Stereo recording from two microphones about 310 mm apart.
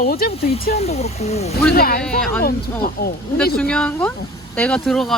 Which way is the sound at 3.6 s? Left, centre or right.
Centre.